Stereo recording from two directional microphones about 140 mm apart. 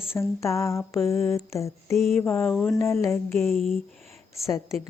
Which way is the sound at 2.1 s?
15° left (ahead or behind).